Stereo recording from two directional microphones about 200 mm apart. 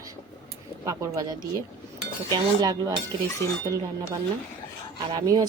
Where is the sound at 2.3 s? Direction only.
20° right (ahead or behind).